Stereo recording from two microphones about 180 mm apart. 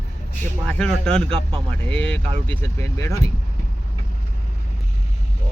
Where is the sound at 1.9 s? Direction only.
5° left (ahead or behind).